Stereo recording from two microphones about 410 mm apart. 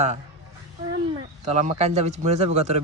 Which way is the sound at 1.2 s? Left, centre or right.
Centre.